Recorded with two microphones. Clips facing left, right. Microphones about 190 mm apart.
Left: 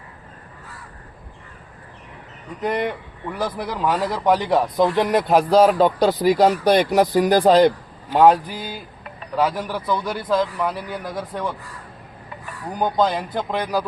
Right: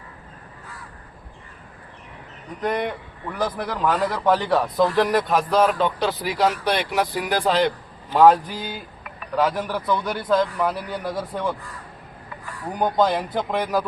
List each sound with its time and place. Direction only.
2.6 s a man's voice: 5° left (ahead or behind); by 5.2 s 20° left (ahead or behind)
5.3 s speech: 35° left (ahead or behind)
8.1 s a man's voice: 15° left (ahead or behind); by 11.5 s 5° right (ahead or behind)
12.8 s a man's voice: 5° right (ahead or behind)